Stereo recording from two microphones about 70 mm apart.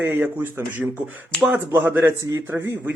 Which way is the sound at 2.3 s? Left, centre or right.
Right.